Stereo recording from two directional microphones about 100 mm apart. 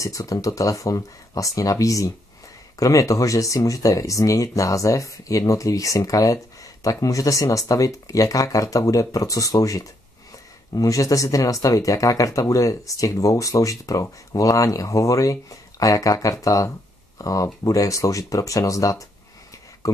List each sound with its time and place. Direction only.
0.0 s speech: 35° left (ahead or behind)